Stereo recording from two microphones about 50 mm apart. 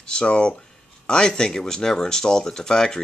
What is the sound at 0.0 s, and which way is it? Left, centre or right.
Speech, centre.